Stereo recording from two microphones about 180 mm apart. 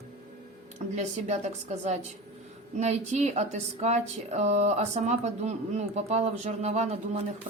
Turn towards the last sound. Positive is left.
turn(degrees=-35)  # may be behind; listen again after turning